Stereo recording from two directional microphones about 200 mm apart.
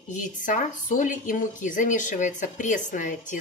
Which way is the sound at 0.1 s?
40° left (ahead or behind).